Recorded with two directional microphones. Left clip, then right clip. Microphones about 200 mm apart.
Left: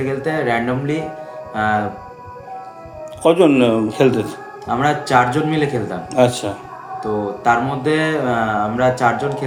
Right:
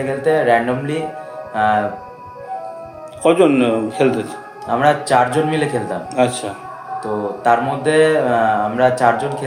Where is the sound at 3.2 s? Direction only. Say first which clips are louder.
Even; 25° left (ahead or behind).